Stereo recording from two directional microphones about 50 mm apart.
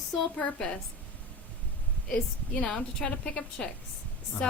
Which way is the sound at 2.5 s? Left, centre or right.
Centre.